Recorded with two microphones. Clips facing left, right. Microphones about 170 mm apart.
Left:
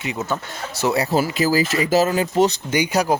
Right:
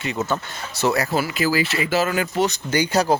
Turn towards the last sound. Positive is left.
turn(degrees=10)  # may be behind; listen again after turning